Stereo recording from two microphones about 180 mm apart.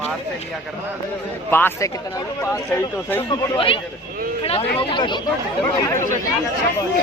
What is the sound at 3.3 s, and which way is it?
Speech, 30° left (ahead or behind).